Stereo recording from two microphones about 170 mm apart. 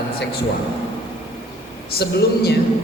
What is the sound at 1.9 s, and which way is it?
Speech, 70° left (ahead or behind).